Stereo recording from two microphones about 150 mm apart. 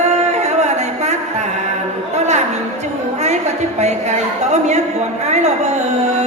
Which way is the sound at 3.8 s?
50° right (ahead or behind).